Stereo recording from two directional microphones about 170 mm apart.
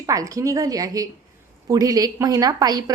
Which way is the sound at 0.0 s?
20° right (ahead or behind).